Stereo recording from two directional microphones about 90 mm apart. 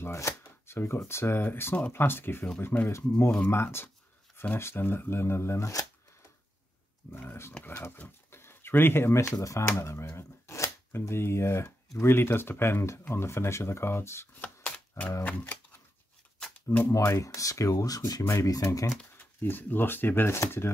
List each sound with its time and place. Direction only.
0.0 s speech: 30° left (ahead or behind)
7.1 s speech: 25° left (ahead or behind)
14.6 s typewriter: 15° left (ahead or behind)
15.2 s speech: 20° left (ahead or behind)
16.6 s speech: 20° left (ahead or behind)
16.9 s speech: 35° left (ahead or behind)
18.2 s speech: 30° left (ahead or behind)
19.1 s speech: 20° left (ahead or behind)